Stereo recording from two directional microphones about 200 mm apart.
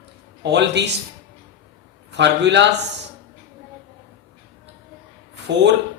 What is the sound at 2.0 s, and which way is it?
Speech, 60° right (ahead or behind).